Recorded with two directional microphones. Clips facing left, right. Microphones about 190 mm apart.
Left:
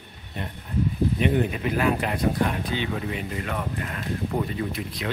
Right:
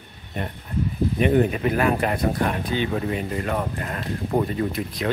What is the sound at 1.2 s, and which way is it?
Speech, 50° right (ahead or behind).